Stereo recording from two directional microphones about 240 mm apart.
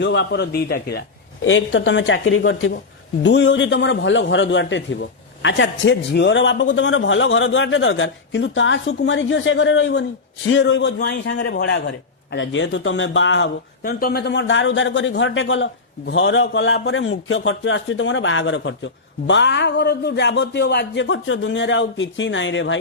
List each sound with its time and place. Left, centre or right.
0.0 s a man's voice: left